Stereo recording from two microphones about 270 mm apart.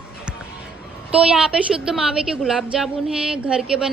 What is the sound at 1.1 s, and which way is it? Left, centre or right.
A woman's voice, centre.